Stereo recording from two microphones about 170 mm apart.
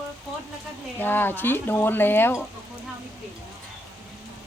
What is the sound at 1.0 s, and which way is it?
Speech, 10° left (ahead or behind).